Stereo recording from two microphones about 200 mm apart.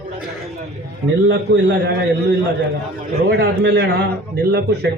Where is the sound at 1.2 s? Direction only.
70° right (ahead or behind).